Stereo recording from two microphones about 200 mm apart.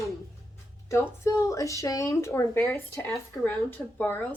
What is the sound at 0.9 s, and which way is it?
Speech, 15° left (ahead or behind).